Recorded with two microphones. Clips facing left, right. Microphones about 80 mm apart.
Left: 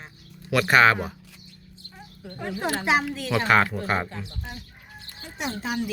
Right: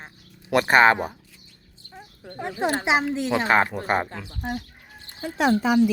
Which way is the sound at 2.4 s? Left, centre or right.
Right.